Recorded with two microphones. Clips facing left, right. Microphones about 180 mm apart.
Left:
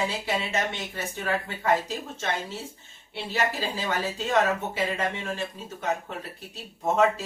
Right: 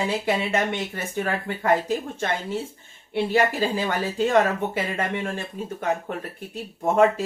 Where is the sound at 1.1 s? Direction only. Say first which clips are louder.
Right 3 dB; 55° right (ahead or behind).